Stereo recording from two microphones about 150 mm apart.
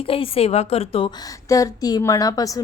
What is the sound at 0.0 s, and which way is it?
A woman's voice, 40° left (ahead or behind).